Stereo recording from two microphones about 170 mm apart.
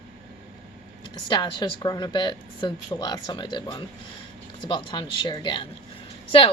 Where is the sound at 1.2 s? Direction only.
25° left (ahead or behind).